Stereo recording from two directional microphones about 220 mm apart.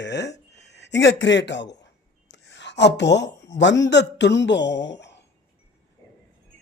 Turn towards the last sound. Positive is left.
turn(degrees=55)  # may be behind; listen again after turning